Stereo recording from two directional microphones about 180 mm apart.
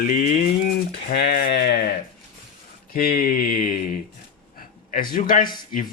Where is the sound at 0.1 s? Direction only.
50° left (ahead or behind).